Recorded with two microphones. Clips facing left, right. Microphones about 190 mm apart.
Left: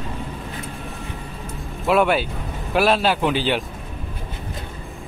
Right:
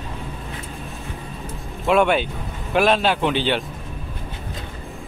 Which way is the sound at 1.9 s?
5° left (ahead or behind).